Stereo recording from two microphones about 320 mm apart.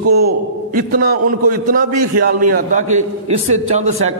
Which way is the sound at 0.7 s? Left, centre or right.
Right.